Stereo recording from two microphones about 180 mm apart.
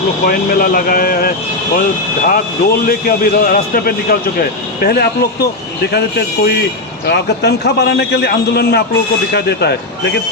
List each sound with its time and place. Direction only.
0.3 s a man's voice: 55° left (ahead or behind)